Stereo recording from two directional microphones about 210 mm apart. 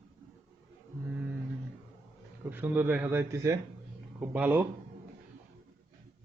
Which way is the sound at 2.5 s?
10° right (ahead or behind).